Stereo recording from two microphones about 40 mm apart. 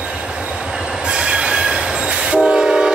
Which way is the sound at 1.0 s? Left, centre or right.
Right.